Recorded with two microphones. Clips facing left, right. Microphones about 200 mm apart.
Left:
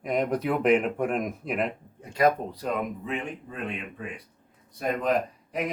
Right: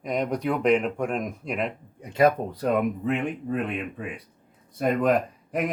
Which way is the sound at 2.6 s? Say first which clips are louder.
Right 6 dB; 60° right (ahead or behind).